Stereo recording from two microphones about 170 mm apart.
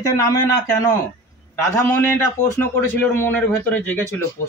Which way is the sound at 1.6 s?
10° left (ahead or behind).